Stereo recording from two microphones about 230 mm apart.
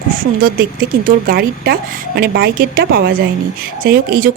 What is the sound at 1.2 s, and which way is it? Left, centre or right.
A woman's voice, right.